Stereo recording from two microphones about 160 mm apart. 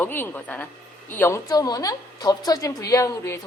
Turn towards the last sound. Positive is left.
turn(degrees=20)  # may be behind; listen again after turning